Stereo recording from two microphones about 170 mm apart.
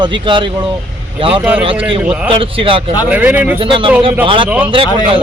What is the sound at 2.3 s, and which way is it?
Speech, 30° right (ahead or behind).